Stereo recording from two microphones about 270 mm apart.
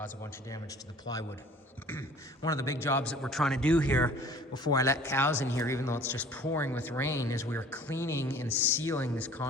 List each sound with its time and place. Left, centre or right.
1.1 s a man's voice: centre